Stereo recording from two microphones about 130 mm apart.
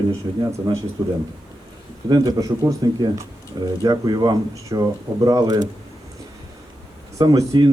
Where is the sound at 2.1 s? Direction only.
30° right (ahead or behind).